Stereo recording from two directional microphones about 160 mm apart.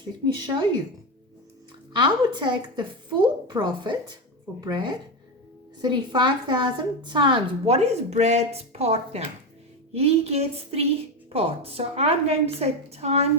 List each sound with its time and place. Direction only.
2.0 s a woman's voice: 30° right (ahead or behind)